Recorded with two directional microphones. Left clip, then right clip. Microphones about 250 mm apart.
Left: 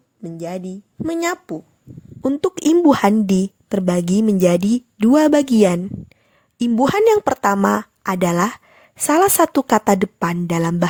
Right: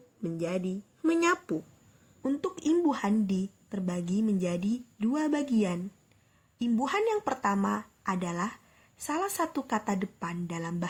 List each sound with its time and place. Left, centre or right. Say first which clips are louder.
0.2 s a woman's voice: left 5 dB; left